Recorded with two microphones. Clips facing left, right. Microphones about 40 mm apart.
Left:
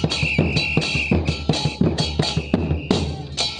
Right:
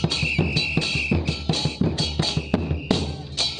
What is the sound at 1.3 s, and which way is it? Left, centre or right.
Music, centre.